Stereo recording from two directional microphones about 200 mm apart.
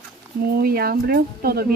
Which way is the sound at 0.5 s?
50° right (ahead or behind).